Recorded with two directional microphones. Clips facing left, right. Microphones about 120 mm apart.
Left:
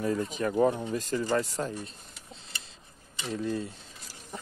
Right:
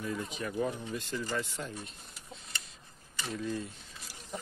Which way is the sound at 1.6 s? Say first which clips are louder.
Left 8 dB; 55° left (ahead or behind).